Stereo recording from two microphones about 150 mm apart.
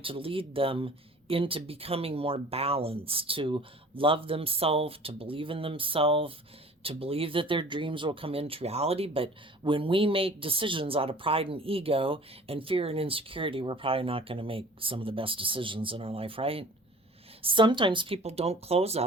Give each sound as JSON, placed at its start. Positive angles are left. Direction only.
{"t": 0.0, "sound": "speech", "side_deg": -35}